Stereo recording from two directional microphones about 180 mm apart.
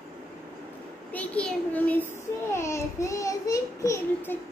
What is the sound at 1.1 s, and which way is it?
A child's voice, 5° left (ahead or behind).